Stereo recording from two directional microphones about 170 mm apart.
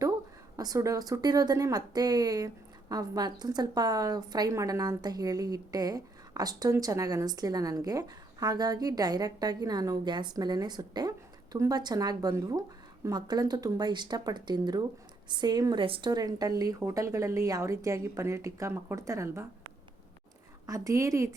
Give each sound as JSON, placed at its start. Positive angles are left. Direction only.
{"t": 0.5, "sound": "a woman's voice", "side_deg": -20}
{"t": 20.7, "sound": "a woman's voice", "side_deg": -20}